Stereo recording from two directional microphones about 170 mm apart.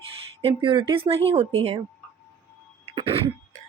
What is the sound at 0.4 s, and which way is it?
Speech, 30° right (ahead or behind).